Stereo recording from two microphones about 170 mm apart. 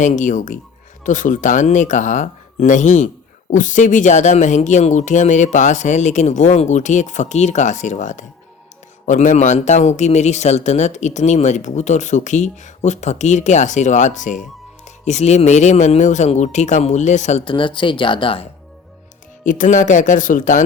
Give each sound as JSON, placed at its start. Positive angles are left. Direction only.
{"t": 0.0, "sound": "speech", "side_deg": 45}
{"t": 17.4, "sound": "speech", "side_deg": 30}
{"t": 19.5, "sound": "speech", "side_deg": 50}